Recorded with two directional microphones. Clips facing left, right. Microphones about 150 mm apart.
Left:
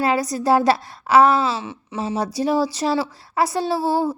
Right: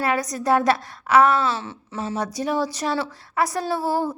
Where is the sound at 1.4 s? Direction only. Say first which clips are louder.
Left 2 dB; 10° left (ahead or behind).